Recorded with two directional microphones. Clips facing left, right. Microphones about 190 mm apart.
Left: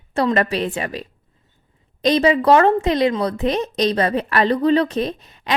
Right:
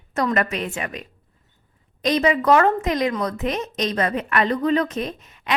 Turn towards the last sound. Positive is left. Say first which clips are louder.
# left 3 dB
turn(degrees=35)  # may be behind; listen again after turning